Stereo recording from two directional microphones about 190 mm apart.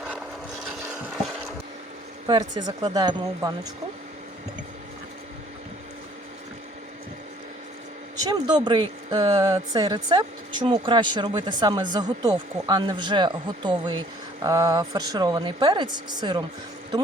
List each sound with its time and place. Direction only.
2.2 s speech: 20° right (ahead or behind)
8.1 s speech: 20° right (ahead or behind)